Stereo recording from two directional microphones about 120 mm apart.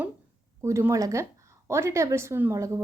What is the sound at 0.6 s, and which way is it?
A woman's voice, 25° right (ahead or behind).